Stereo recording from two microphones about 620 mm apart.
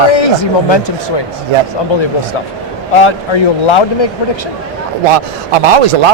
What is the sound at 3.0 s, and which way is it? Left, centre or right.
Speech, left.